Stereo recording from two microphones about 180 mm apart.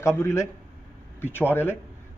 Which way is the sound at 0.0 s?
15° left (ahead or behind).